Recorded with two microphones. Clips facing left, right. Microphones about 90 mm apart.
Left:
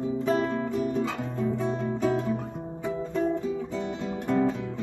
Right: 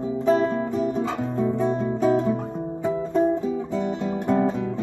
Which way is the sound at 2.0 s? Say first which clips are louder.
Right 7 dB; 35° right (ahead or behind).